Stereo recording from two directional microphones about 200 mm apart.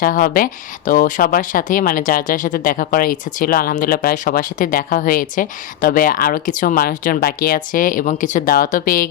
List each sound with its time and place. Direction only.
0.0 s speech: 45° left (ahead or behind)